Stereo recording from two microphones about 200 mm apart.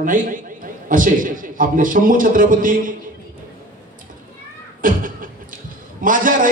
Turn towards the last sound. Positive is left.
turn(degrees=-40)  # may be behind; listen again after turning